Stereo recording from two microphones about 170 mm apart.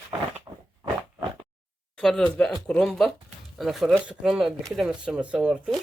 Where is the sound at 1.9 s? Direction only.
5° left (ahead or behind).